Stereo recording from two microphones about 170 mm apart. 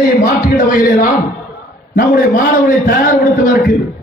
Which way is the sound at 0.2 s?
55° left (ahead or behind).